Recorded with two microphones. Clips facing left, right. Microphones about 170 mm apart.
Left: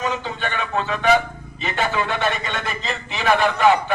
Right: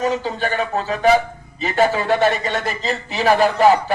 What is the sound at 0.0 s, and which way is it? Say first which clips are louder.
A man's voice: right 5 dB; 35° right (ahead or behind).